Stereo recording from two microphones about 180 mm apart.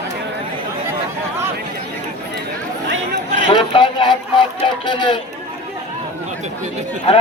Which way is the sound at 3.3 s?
25° left (ahead or behind).